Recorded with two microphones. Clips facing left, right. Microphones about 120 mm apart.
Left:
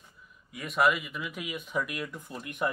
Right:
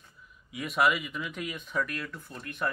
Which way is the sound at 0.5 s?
Centre (ahead or behind).